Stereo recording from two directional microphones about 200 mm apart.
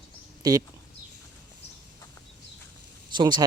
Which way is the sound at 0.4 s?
20° right (ahead or behind).